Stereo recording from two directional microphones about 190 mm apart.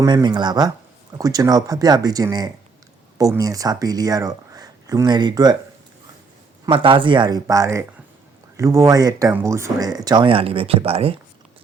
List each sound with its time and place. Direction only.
0.0 s speech: 20° right (ahead or behind)
6.7 s speech: 25° right (ahead or behind)